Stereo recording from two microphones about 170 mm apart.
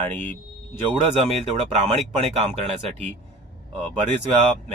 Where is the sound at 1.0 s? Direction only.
40° right (ahead or behind).